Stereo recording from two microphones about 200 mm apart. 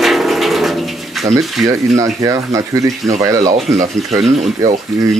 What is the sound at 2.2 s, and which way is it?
Speech, 15° right (ahead or behind).